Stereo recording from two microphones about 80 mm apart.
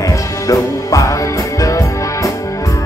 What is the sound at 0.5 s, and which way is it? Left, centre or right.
Music, left.